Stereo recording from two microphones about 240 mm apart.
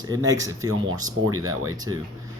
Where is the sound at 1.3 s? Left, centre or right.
Right.